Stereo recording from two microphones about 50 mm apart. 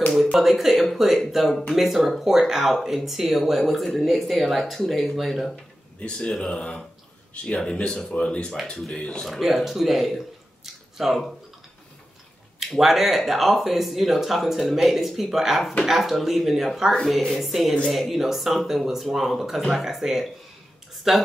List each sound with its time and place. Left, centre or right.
0.1 s speech: centre
5.9 s speech: left
9.2 s speech: centre
12.5 s speech: centre